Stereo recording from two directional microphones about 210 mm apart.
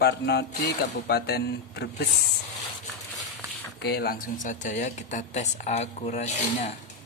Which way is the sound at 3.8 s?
50° left (ahead or behind).